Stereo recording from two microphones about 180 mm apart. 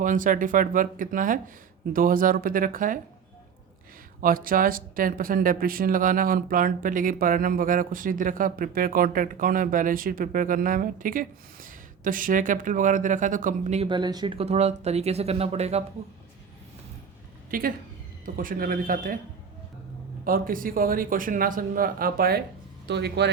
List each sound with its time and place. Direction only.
0.0 s speech: 45° right (ahead or behind)
4.2 s speech: 50° right (ahead or behind)
13.8 s speech: 25° right (ahead or behind)
17.5 s speech: 50° right (ahead or behind)
20.2 s speech: 50° right (ahead or behind)
22.9 s speech: 70° right (ahead or behind)